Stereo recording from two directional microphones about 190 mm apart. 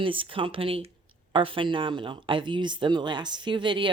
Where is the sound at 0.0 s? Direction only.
25° right (ahead or behind).